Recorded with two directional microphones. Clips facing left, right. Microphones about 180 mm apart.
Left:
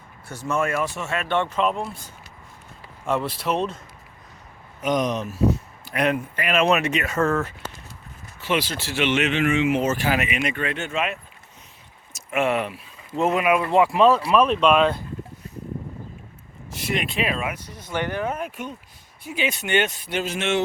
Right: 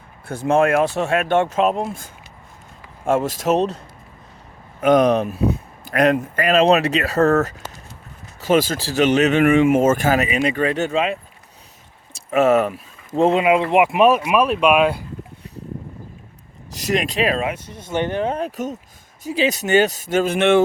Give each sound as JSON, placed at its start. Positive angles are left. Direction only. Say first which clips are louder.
{"t": 0.4, "sound": "speech", "louder": "right 8 dB", "side_deg": -90}
{"t": 4.8, "sound": "speech", "louder": "right 8 dB", "side_deg": -60}
{"t": 12.1, "sound": "vehicle", "louder": "right 7 dB", "side_deg": -40}
{"t": 13.2, "sound": "speech", "louder": "right 4 dB", "side_deg": -25}
{"t": 16.8, "sound": "speech", "louder": "right 6 dB", "side_deg": -40}
{"t": 17.5, "sound": "speech", "louder": "right 5 dB", "side_deg": -25}